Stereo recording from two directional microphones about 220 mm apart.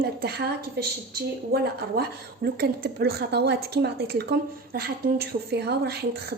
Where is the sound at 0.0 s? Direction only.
45° right (ahead or behind).